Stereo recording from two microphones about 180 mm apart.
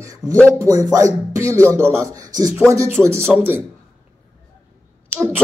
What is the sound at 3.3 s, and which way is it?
Speech, 10° right (ahead or behind).